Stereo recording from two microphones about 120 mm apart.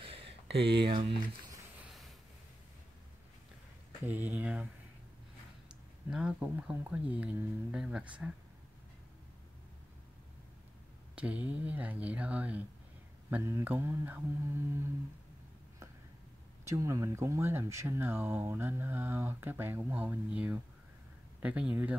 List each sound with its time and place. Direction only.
0.0 s a sound: 50° right (ahead or behind)
4.0 s speech: 15° right (ahead or behind)
6.0 s speech: 5° right (ahead or behind)
11.1 s speech: 10° right (ahead or behind)
13.3 s speech: 20° right (ahead or behind)
16.6 s speech: 25° right (ahead or behind)